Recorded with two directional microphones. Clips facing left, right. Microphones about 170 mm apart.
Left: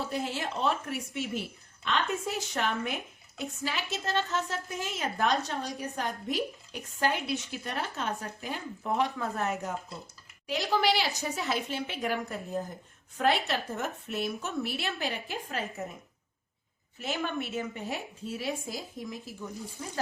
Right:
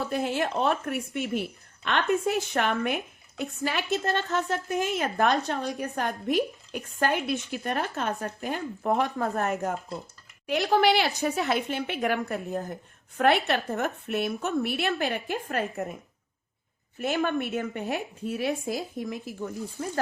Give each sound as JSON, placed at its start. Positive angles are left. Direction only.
{"t": 0.1, "sound": "speech", "side_deg": -55}
{"t": 17.0, "sound": "speech", "side_deg": -55}